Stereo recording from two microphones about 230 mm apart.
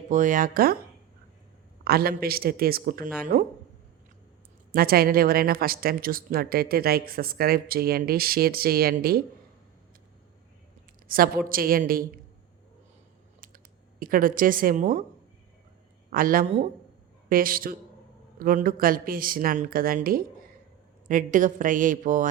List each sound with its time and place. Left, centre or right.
0.1 s a woman's voice: right
1.8 s a woman's voice: right
4.7 s a woman's voice: right
11.1 s a woman's voice: right
14.0 s a woman's voice: right
16.0 s a woman's voice: right